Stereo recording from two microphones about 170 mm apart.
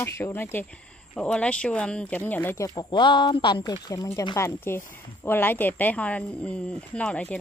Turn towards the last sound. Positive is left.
turn(degrees=5)  # may be behind; listen again after turning